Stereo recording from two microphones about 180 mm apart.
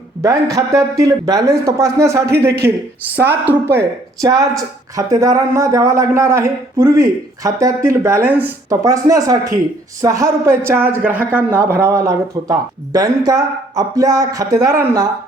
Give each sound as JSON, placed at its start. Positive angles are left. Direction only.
{"t": 0.5, "sound": "speech", "side_deg": -20}